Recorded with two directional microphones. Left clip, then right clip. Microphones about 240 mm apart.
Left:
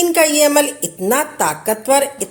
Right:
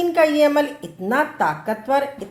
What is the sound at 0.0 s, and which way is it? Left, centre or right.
A woman's voice, left.